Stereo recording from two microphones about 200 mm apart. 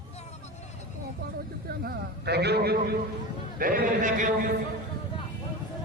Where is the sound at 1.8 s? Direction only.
55° right (ahead or behind).